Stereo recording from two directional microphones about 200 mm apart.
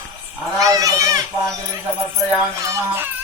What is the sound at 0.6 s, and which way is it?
Goat, 15° right (ahead or behind).